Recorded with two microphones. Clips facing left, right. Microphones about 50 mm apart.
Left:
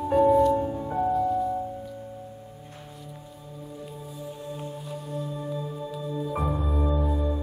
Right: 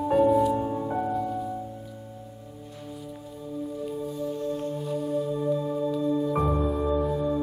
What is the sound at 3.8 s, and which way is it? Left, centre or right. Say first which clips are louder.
Music: right 7 dB; centre.